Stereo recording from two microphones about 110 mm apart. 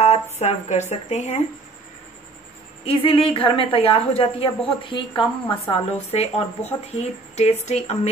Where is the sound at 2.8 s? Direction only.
60° left (ahead or behind).